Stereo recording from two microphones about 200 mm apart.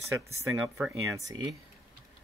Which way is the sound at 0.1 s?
15° right (ahead or behind).